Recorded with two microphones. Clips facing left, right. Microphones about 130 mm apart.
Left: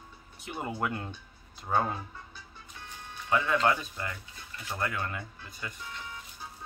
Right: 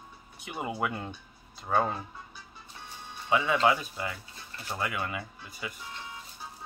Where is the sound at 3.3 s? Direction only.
10° right (ahead or behind).